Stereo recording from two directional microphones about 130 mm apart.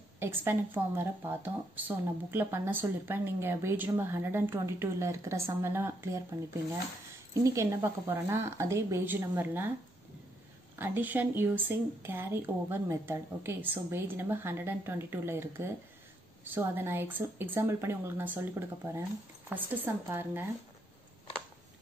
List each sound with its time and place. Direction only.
0.2 s speech: 15° right (ahead or behind)
7.4 s a woman's voice: 20° right (ahead or behind)
10.8 s speech: 15° right (ahead or behind)